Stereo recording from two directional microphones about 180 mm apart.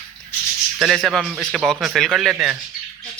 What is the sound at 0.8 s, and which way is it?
Speech, centre (ahead or behind).